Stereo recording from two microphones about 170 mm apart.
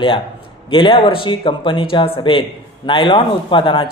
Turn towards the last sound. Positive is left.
turn(degrees=30)  # may be behind; listen again after turning